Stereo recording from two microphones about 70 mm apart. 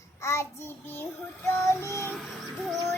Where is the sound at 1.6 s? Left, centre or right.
Left.